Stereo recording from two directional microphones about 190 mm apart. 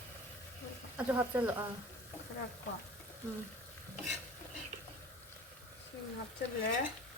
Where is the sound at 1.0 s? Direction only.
10° right (ahead or behind).